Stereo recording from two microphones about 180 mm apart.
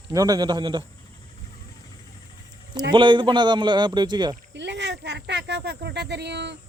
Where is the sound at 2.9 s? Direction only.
25° right (ahead or behind).